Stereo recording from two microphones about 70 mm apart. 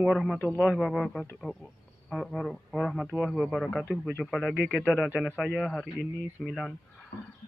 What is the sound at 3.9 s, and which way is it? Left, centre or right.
Speech, left.